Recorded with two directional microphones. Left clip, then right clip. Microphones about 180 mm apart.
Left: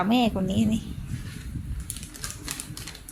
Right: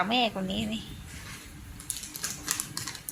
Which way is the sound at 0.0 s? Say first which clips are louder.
Left 2 dB; 40° left (ahead or behind).